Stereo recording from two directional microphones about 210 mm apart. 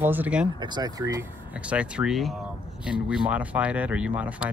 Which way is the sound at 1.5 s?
5° right (ahead or behind).